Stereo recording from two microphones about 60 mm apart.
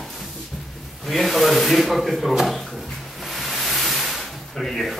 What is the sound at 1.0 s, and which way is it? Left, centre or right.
A man's voice, centre.